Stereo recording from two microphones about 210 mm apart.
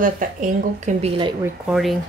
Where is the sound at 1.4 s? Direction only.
Centre (ahead or behind).